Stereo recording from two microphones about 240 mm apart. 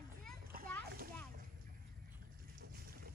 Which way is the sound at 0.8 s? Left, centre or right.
Right.